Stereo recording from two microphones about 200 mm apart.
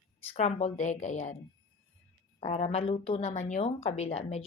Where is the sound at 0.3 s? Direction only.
35° left (ahead or behind).